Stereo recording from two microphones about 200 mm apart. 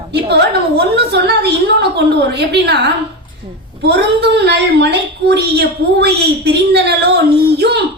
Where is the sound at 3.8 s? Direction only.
55° right (ahead or behind).